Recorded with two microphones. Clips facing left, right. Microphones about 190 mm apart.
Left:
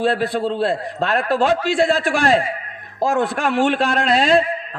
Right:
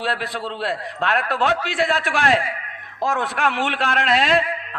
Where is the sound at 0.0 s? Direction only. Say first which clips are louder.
Left 7 dB; 45° left (ahead or behind).